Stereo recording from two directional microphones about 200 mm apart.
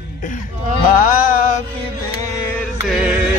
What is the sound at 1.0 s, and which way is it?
Music, 40° left (ahead or behind).